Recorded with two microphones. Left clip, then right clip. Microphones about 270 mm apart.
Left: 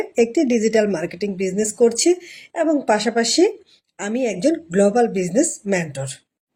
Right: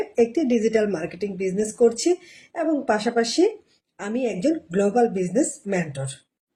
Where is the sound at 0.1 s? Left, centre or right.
Left.